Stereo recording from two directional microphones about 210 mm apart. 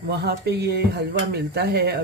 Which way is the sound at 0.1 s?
50° right (ahead or behind).